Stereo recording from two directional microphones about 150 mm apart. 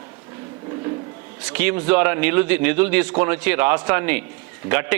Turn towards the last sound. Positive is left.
turn(degrees=-10)  # may be behind; listen again after turning